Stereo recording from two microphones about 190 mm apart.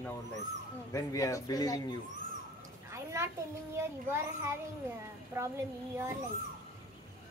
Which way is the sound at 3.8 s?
15° right (ahead or behind).